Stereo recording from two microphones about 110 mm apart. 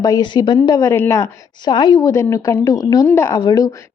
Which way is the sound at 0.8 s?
25° left (ahead or behind).